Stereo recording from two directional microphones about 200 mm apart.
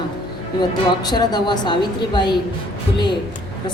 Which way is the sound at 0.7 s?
20° left (ahead or behind).